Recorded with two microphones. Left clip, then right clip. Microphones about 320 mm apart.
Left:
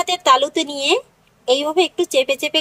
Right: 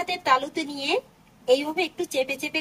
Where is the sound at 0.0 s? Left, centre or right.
Centre.